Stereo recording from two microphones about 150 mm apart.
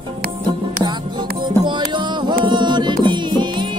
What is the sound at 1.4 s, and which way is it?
Music, 30° right (ahead or behind).